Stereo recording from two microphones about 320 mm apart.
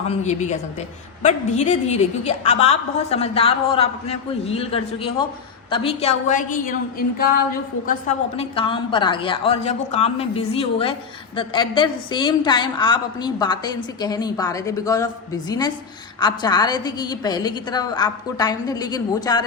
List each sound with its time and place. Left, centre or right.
0.1 s a woman's voice: left